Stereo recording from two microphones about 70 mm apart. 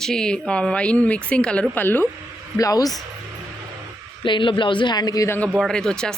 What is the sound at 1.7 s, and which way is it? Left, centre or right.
Speech, left.